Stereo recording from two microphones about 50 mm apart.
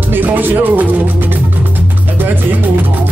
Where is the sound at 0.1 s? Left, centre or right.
Right.